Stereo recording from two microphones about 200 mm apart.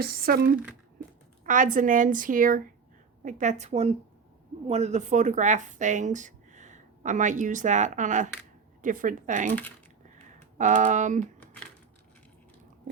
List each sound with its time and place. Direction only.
0.0 s speech: 50° right (ahead or behind)
0.5 s speech: 5° right (ahead or behind)
1.5 s a woman's voice: 40° right (ahead or behind)
10.6 s a woman's voice: 40° right (ahead or behind)